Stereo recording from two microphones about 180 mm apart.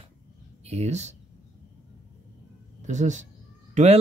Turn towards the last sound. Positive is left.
turn(degrees=-40)  # may be behind; listen again after turning